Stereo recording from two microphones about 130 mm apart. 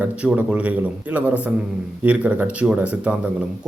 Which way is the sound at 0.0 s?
10° right (ahead or behind).